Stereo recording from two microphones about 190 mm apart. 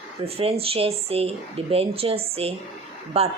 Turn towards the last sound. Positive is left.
turn(degrees=-30)  # may be behind; listen again after turning